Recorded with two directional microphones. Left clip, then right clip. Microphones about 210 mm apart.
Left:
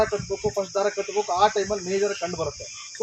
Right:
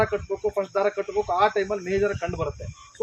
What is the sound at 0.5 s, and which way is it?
Speech, 10° left (ahead or behind).